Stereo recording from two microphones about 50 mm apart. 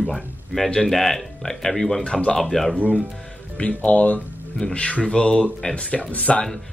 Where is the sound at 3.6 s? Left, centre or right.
Left.